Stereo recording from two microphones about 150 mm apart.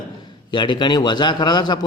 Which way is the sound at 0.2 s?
30° left (ahead or behind).